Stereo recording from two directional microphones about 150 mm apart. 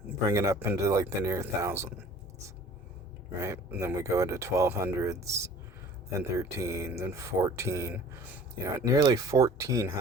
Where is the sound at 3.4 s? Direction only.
20° right (ahead or behind).